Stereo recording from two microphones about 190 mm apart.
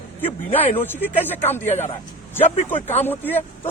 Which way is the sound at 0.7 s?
10° left (ahead or behind).